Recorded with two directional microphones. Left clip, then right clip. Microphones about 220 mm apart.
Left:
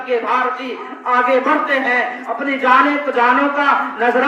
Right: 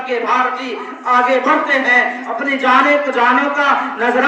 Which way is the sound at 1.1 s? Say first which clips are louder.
Right 1 dB; 50° left (ahead or behind).